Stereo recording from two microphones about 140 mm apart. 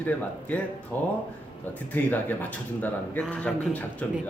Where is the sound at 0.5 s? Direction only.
10° left (ahead or behind).